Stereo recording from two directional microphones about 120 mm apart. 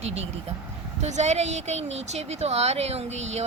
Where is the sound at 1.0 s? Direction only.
70° right (ahead or behind).